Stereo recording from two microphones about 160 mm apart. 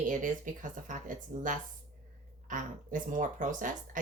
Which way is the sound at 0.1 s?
55° right (ahead or behind).